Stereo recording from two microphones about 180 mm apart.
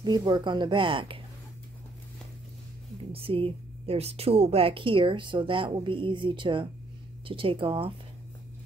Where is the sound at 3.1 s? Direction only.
30° right (ahead or behind).